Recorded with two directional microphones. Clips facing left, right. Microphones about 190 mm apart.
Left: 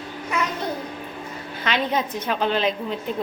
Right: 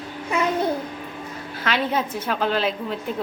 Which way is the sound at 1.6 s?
5° right (ahead or behind).